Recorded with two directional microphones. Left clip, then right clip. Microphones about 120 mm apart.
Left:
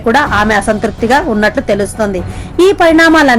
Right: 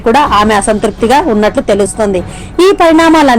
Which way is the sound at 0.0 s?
20° right (ahead or behind).